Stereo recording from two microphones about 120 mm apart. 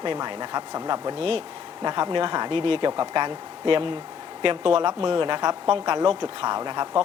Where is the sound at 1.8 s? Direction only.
35° right (ahead or behind).